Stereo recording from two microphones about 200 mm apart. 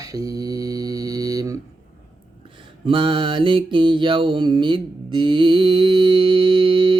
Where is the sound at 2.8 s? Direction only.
25° right (ahead or behind).